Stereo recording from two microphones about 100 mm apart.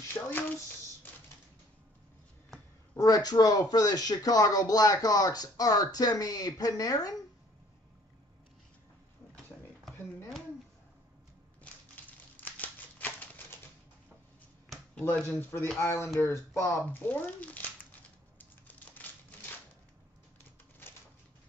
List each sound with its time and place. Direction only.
0.1 s speech: 20° left (ahead or behind)
3.0 s speech: 40° left (ahead or behind)
11.6 s a sound: 15° left (ahead or behind)
15.2 s speech: 25° left (ahead or behind)
18.4 s music: 15° left (ahead or behind)